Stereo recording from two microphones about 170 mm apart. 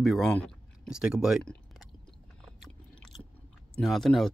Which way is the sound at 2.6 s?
Centre (ahead or behind).